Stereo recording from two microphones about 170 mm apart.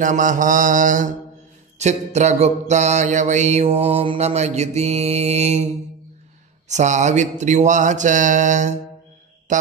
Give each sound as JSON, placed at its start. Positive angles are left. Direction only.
{"t": 0.0, "sound": "mantra", "side_deg": -50}
{"t": 6.7, "sound": "mantra", "side_deg": -45}